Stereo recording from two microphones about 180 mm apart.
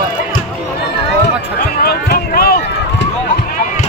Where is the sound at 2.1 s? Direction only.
55° left (ahead or behind).